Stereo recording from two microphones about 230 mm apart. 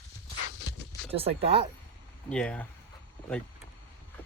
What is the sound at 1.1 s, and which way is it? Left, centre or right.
Speech, right.